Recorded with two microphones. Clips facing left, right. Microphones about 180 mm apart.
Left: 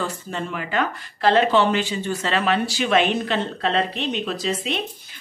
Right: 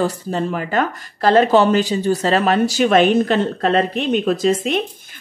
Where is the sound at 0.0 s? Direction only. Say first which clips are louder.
Right 8 dB; 35° right (ahead or behind).